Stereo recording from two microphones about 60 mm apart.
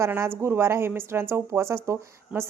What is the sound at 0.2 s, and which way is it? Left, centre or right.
A woman's voice, right.